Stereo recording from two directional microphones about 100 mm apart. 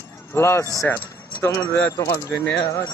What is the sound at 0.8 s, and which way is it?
Speech, 20° left (ahead or behind).